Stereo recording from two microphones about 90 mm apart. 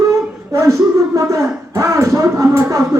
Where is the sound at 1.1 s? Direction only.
35° right (ahead or behind).